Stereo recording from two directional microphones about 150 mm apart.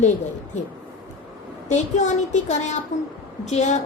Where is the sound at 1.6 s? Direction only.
50° left (ahead or behind).